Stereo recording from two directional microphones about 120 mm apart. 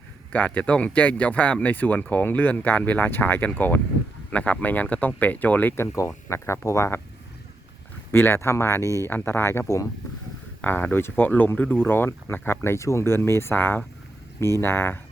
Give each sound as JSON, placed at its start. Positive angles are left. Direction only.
{"t": 0.3, "sound": "speech", "side_deg": 10}
{"t": 8.1, "sound": "speech", "side_deg": 20}
{"t": 8.8, "sound": "speech", "side_deg": -25}
{"t": 9.0, "sound": "speech", "side_deg": 20}